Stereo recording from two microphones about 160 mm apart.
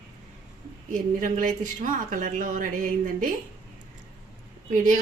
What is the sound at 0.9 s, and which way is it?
Speech, 55° right (ahead or behind).